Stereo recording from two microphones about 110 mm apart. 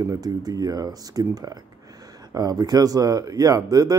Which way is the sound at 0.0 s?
35° right (ahead or behind).